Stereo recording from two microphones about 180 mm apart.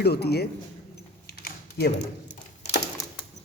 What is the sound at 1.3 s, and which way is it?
Typing, 60° left (ahead or behind).